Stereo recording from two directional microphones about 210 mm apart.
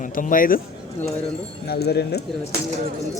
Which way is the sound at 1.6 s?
50° left (ahead or behind).